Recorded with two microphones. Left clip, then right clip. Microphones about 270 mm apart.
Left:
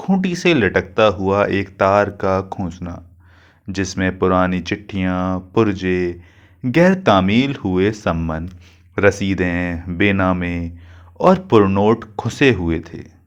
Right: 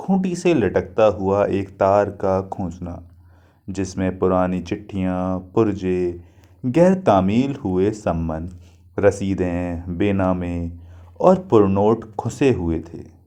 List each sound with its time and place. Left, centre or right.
0.0 s speech: left